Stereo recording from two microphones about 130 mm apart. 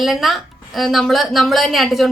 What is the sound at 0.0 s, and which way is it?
A woman's voice, centre (ahead or behind).